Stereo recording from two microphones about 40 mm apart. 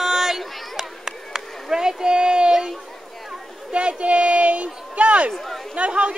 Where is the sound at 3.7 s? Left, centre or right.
Right.